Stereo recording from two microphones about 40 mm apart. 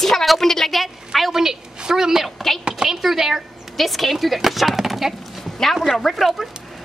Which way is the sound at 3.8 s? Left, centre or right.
Centre.